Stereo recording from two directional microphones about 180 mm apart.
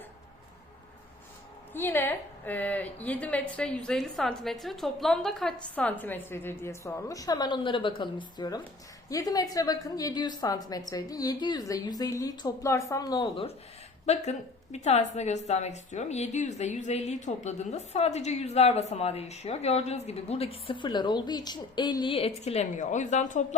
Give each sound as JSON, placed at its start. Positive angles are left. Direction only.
{"t": 1.7, "sound": "a woman's voice", "side_deg": 10}
{"t": 14.0, "sound": "a woman's voice", "side_deg": 35}